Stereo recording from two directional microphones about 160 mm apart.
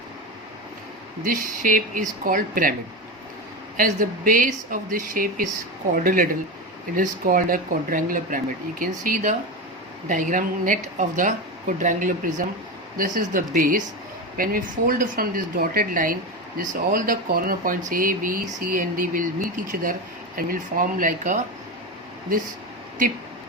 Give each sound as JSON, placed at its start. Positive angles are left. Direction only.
{"t": 1.2, "sound": "speech", "side_deg": -60}
{"t": 3.8, "sound": "speech", "side_deg": -55}